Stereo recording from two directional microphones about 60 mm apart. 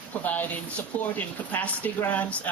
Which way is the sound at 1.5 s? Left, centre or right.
Left.